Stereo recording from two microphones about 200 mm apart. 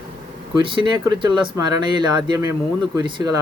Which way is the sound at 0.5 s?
25° right (ahead or behind).